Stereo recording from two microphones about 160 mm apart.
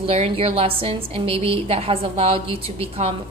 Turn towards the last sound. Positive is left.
turn(degrees=-35)  # may be behind; listen again after turning